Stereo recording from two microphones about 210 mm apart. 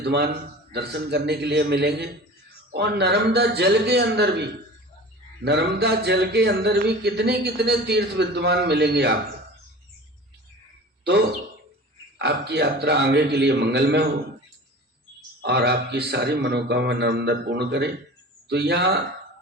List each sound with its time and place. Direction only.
0.0 s a man's voice: 50° right (ahead or behind)
5.5 s speech: 50° right (ahead or behind)
12.2 s speech: 50° right (ahead or behind)
15.4 s speech: 50° right (ahead or behind)